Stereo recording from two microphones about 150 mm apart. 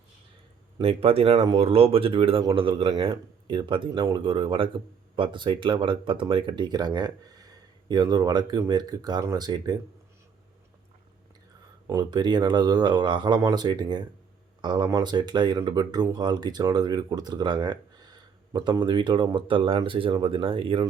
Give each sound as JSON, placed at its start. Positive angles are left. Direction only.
{"t": 0.8, "sound": "speech", "side_deg": -40}
{"t": 11.9, "sound": "speech", "side_deg": -25}